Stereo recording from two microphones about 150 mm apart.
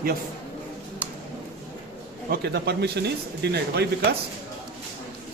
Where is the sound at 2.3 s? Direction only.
90° right.